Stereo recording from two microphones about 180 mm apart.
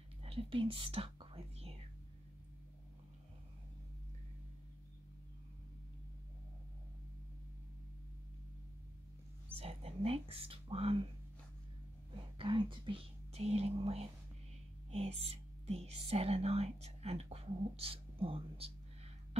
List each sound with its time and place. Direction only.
0.2 s whispering: 30° right (ahead or behind)
9.6 s a sound: 35° right (ahead or behind)
12.4 s whispering: 25° right (ahead or behind)